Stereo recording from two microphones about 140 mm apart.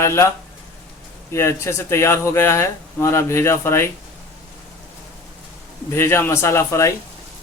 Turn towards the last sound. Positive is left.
turn(degrees=20)  # may be behind; listen again after turning